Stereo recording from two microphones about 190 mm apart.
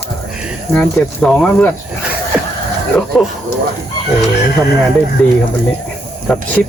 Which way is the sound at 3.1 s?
Centre (ahead or behind).